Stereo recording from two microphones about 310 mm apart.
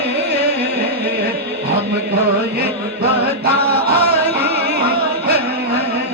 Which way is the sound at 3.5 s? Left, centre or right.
Right.